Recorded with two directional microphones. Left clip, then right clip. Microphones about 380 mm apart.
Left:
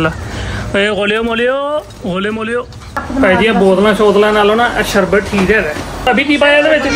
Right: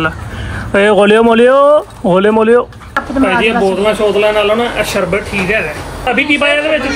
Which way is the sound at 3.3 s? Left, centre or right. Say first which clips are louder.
Left 3 dB; left.